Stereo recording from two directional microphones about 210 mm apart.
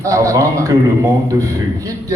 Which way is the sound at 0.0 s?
15° right (ahead or behind).